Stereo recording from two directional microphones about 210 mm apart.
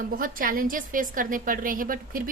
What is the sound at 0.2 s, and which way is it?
A woman's voice, 40° right (ahead or behind).